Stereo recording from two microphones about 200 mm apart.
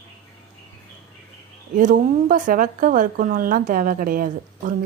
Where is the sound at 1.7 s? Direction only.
40° right (ahead or behind).